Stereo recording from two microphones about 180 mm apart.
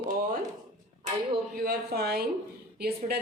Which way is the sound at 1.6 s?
60° right (ahead or behind).